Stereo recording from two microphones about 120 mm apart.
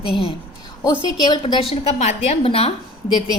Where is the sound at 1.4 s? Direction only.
50° left (ahead or behind).